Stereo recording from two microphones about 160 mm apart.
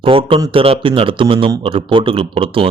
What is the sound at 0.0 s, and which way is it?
Speech, 35° right (ahead or behind).